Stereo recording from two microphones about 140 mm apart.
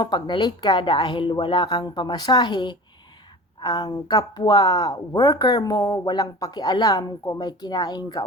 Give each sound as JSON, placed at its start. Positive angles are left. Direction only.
{"t": 0.0, "sound": "a woman's voice", "side_deg": 30}